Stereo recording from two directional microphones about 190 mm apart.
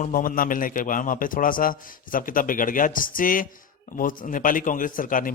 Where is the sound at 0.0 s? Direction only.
45° left (ahead or behind).